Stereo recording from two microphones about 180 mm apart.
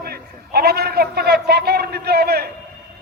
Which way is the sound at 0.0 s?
60° right (ahead or behind).